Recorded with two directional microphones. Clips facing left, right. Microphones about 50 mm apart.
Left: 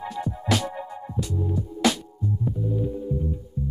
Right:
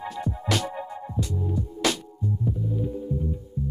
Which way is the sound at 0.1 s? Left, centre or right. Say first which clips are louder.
Left 2 dB; centre.